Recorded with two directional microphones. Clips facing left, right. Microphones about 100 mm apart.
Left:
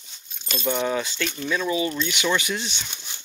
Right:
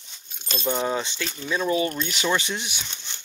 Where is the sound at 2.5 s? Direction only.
15° right (ahead or behind).